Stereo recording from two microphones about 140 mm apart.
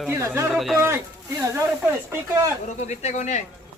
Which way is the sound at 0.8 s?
20° right (ahead or behind).